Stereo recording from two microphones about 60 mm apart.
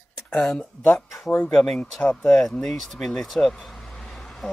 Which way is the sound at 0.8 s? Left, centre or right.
Centre.